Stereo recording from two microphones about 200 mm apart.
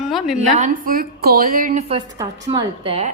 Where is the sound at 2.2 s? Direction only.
25° right (ahead or behind).